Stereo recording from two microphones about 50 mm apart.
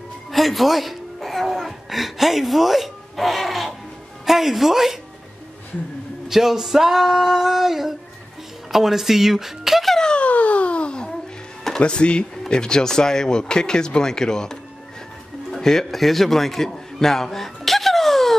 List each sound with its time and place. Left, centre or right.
0.3 s a woman's voice: centre
6.2 s female singing: centre
8.7 s speech: centre
9.9 s a sound: centre
10.2 s a sound: left
11.8 s a man's voice: left; by 18.3 s centre